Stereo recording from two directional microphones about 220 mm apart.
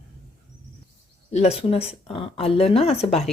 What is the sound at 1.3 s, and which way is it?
A woman's voice, 30° left (ahead or behind).